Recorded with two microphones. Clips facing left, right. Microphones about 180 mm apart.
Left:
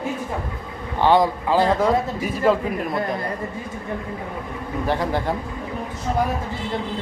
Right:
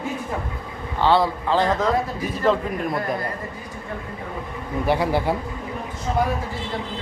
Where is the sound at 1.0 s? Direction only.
15° left (ahead or behind).